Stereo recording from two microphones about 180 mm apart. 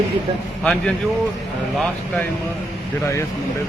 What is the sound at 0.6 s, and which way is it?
Speech, 5° left (ahead or behind).